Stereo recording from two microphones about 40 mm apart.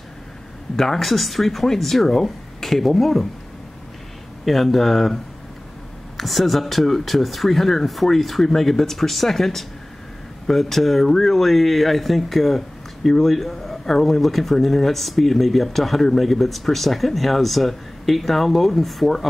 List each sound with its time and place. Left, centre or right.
0.7 s speech: centre
4.5 s speech: centre